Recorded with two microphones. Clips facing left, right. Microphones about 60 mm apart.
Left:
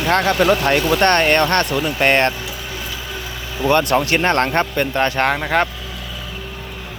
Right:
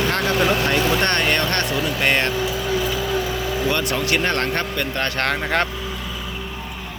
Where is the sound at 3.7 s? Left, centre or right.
Left.